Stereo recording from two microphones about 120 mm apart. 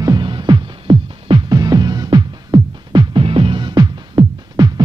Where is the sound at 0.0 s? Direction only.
35° right (ahead or behind).